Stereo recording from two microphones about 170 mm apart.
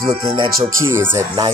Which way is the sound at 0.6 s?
15° right (ahead or behind).